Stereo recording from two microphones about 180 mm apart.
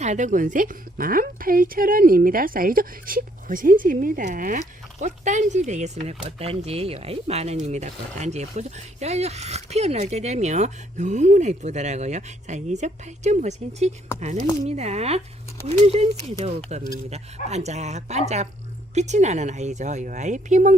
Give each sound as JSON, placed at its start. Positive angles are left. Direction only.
{"t": 0.0, "sound": "a woman's voice", "side_deg": -40}